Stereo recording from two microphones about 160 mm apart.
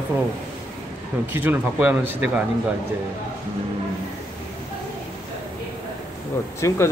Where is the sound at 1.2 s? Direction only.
15° right (ahead or behind).